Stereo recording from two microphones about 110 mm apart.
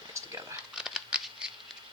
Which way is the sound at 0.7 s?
5° right (ahead or behind).